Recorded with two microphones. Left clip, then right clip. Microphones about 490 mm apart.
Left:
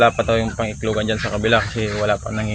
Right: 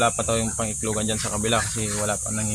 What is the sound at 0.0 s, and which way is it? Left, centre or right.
Speech, right.